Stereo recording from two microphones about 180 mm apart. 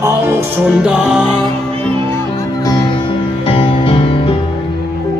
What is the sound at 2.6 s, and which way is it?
Music, 20° left (ahead or behind).